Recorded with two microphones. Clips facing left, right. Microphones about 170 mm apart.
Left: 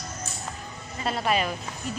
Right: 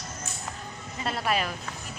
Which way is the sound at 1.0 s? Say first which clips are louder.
Left 3 dB; centre (ahead or behind).